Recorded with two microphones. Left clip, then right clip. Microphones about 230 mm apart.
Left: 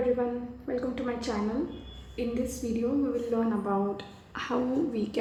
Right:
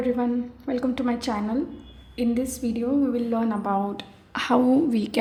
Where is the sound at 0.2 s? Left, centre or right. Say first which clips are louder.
Right 4 dB; right.